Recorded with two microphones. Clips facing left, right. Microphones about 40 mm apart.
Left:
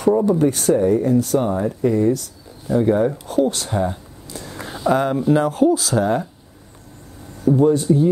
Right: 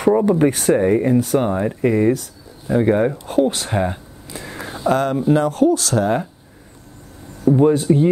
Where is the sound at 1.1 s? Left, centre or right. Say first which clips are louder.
Right 1 dB; right.